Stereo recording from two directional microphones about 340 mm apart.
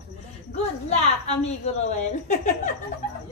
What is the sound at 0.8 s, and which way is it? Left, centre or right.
A woman's voice, centre.